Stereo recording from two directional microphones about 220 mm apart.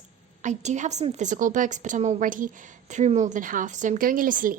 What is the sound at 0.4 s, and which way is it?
A woman's voice, 35° right (ahead or behind).